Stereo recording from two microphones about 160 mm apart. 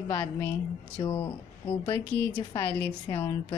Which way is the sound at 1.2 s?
35° left (ahead or behind).